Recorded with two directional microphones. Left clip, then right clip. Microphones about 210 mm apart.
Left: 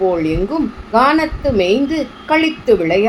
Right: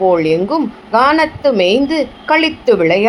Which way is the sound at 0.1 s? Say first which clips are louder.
Right 5 dB; 20° right (ahead or behind).